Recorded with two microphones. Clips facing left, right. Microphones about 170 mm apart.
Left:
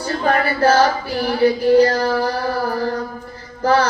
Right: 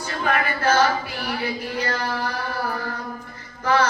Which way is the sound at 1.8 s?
35° left (ahead or behind).